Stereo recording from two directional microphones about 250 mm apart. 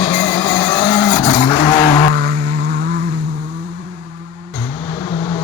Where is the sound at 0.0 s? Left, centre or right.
Centre.